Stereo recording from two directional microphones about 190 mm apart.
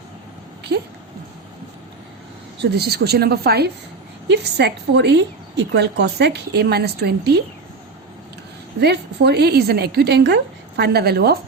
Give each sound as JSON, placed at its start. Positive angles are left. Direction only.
{"t": 0.7, "sound": "speech", "side_deg": -65}
{"t": 2.6, "sound": "a woman's voice", "side_deg": -60}
{"t": 8.8, "sound": "a woman's voice", "side_deg": -60}